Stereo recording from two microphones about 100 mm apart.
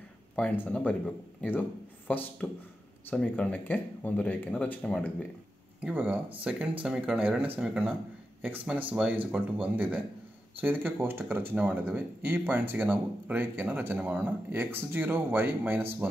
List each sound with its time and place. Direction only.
0.4 s speech: 15° left (ahead or behind)
5.8 s speech: 15° right (ahead or behind)
8.9 s speech: 10° right (ahead or behind)